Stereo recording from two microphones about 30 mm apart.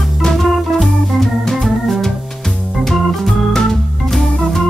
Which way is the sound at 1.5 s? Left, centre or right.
Centre.